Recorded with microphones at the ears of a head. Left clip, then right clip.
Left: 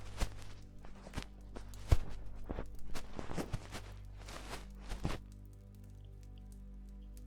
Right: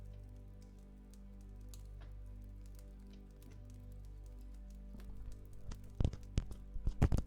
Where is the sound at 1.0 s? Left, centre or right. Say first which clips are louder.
Left 13 dB; left.